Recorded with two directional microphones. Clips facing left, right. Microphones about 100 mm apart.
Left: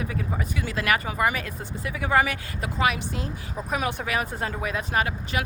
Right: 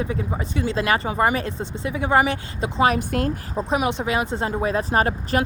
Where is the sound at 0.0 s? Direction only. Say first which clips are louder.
Right 4 dB; 25° right (ahead or behind).